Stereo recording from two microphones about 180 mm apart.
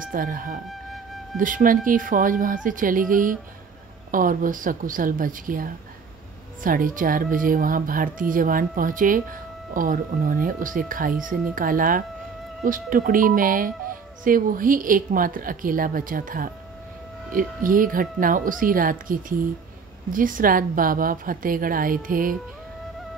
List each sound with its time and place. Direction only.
0.0 s speech: 50° right (ahead or behind)
0.7 s music: centre (ahead or behind)
1.4 s speech: 50° right (ahead or behind)